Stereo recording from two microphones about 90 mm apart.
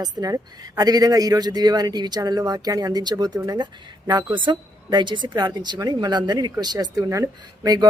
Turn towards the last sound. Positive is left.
turn(degrees=-45)  # may be behind; listen again after turning